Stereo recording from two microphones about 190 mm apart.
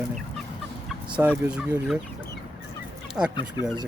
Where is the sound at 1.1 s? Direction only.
5° right (ahead or behind).